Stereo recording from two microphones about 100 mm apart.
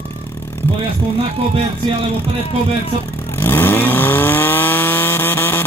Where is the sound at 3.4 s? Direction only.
20° left (ahead or behind).